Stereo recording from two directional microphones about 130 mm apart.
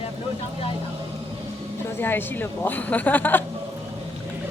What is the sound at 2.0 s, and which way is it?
A woman's voice, 15° left (ahead or behind).